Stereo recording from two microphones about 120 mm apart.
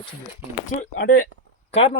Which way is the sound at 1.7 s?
55° left (ahead or behind).